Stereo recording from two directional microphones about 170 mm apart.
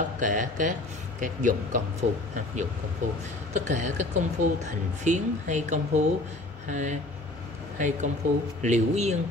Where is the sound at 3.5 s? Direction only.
45° right (ahead or behind).